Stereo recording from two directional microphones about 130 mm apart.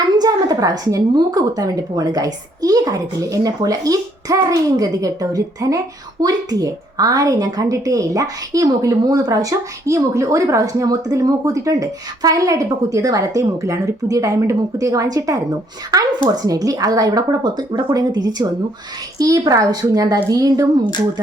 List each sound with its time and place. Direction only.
0.0 s a woman's voice: 30° right (ahead or behind)